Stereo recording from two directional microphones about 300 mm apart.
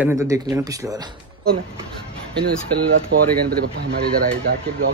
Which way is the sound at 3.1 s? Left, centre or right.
Right.